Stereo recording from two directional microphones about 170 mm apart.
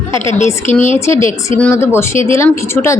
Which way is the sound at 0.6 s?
45° left (ahead or behind).